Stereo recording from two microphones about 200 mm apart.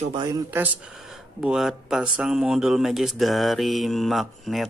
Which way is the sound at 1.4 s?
Centre (ahead or behind).